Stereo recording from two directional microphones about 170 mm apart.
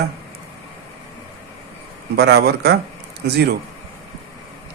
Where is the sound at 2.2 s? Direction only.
75° right (ahead or behind).